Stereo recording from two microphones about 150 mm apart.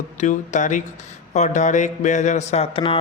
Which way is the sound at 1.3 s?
50° left (ahead or behind).